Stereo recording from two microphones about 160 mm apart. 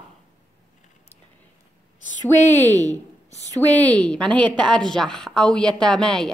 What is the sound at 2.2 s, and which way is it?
A woman's voice, 10° left (ahead or behind).